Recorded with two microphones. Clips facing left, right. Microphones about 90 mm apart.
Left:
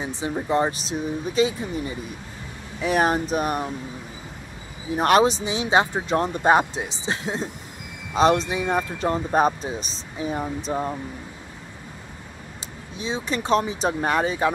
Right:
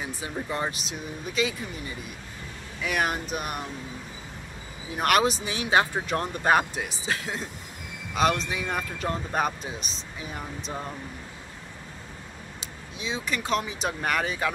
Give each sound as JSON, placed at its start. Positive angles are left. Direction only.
{"t": 0.0, "sound": "speech", "side_deg": 25}
{"t": 4.9, "sound": "speech", "side_deg": 30}
{"t": 12.9, "sound": "speech", "side_deg": 35}